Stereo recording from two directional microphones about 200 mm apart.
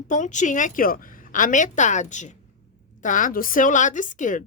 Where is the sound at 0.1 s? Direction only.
40° left (ahead or behind).